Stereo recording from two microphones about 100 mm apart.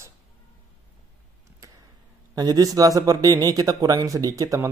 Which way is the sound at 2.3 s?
40° right (ahead or behind).